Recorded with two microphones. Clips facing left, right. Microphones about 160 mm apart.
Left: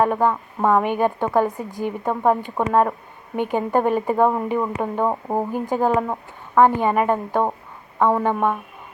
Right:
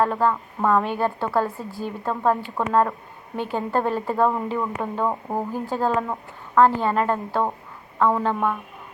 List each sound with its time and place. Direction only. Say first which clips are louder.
0.0 s speech: left 2 dB; 15° left (ahead or behind)